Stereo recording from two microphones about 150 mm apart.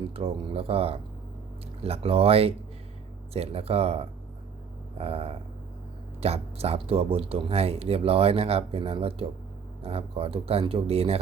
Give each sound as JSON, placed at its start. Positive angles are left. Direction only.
{"t": 0.1, "sound": "speech", "side_deg": -40}